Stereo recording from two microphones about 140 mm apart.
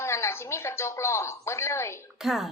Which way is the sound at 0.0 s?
20° left (ahead or behind).